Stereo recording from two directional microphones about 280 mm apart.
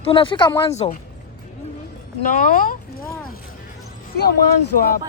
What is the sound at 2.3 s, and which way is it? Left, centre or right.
Speech, left.